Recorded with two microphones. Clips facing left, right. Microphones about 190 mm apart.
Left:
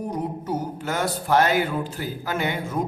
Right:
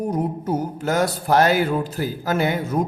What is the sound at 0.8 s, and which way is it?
Speech, 40° right (ahead or behind).